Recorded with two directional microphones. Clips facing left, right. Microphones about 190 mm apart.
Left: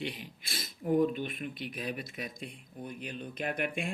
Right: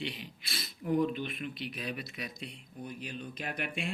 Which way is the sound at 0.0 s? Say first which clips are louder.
Left 1 dB; 50° left (ahead or behind).